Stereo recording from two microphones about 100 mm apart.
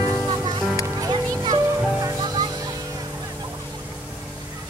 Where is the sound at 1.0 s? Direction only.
40° right (ahead or behind).